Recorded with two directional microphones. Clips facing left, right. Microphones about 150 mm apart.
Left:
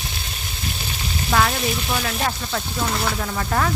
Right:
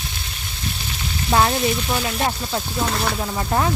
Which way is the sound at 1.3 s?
25° right (ahead or behind).